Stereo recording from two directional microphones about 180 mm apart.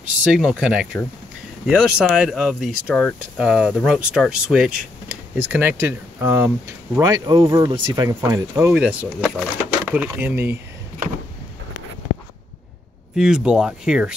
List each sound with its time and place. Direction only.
0.2 s speech: 5° right (ahead or behind)
13.1 s speech: 5° right (ahead or behind)